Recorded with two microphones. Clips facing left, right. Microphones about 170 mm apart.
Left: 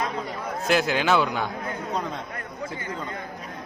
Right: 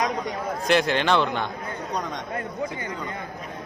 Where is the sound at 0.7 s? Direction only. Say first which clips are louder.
Right 1 dB; 5° left (ahead or behind).